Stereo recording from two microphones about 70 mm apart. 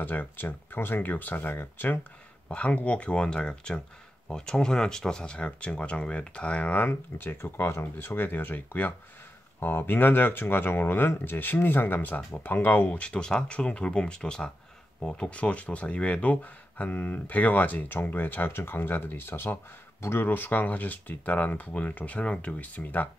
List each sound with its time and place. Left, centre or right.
0.0 s speech: left
2.4 s speech: centre
6.9 s speech: left